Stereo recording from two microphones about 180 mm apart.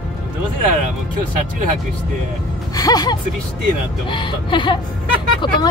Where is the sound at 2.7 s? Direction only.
20° left (ahead or behind).